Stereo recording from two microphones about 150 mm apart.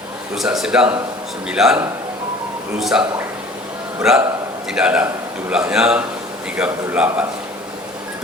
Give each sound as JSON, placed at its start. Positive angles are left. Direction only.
{"t": 0.3, "sound": "a man's voice", "side_deg": 0}